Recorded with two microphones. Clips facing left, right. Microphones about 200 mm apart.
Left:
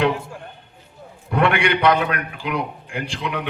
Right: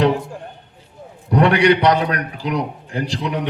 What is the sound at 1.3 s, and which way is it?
A man's voice, 40° right (ahead or behind).